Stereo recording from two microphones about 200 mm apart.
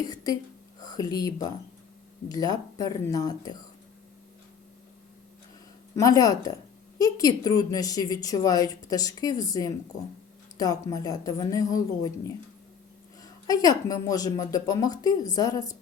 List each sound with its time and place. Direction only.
0.0 s a woman's voice: 20° left (ahead or behind)
6.0 s a woman's voice: 15° left (ahead or behind)
13.2 s speech: 20° left (ahead or behind)